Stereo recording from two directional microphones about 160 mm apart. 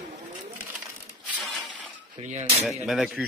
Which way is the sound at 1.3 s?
Centre (ahead or behind).